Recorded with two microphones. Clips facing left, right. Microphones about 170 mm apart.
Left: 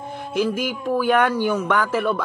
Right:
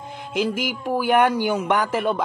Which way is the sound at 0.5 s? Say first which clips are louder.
Left 2 dB; 10° right (ahead or behind).